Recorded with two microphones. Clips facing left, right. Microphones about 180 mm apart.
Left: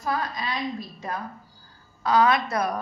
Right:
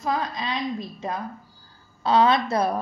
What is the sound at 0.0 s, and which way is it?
A woman's voice, 20° right (ahead or behind).